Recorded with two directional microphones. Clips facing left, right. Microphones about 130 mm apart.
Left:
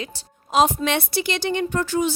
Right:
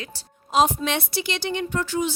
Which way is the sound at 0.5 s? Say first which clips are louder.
Left 2 dB; 70° left (ahead or behind).